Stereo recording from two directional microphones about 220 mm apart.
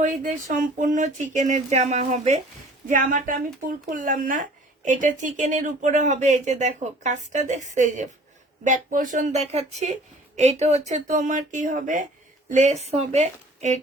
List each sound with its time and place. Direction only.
0.0 s a woman's voice: 35° right (ahead or behind)